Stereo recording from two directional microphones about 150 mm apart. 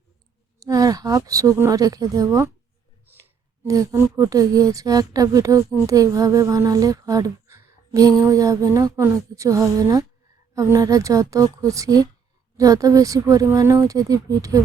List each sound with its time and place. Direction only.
0.6 s speech: 25° right (ahead or behind)
3.7 s speech: 20° right (ahead or behind)